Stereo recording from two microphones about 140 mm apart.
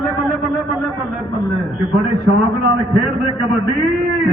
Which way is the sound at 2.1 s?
25° left (ahead or behind).